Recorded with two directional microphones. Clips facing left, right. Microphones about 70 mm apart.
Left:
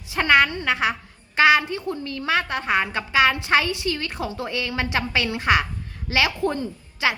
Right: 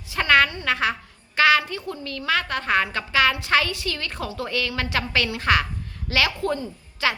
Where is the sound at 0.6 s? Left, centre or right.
Centre.